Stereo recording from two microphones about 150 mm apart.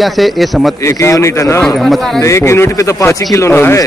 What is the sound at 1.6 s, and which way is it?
Speech, centre (ahead or behind).